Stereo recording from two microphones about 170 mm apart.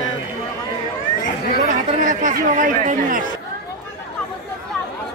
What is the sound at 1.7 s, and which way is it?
A man's voice, 50° right (ahead or behind).